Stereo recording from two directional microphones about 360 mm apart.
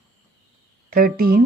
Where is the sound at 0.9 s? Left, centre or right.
Right.